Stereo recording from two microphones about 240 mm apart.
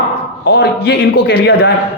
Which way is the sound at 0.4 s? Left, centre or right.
Left.